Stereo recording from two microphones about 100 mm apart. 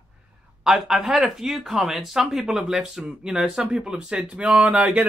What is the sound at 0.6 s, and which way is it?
Speech, 5° right (ahead or behind).